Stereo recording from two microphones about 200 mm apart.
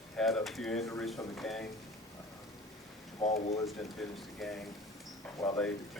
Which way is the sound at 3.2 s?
30° left (ahead or behind).